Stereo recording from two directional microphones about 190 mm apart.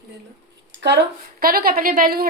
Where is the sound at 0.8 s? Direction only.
65° right (ahead or behind); by 2.2 s 50° right (ahead or behind).